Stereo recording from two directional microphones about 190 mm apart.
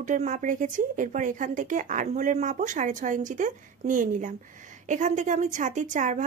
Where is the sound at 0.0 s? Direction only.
40° right (ahead or behind).